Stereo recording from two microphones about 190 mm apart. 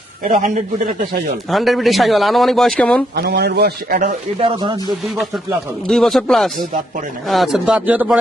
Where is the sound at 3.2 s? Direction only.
55° right (ahead or behind).